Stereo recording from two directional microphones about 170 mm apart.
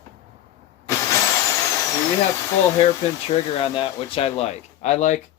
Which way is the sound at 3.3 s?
30° left (ahead or behind).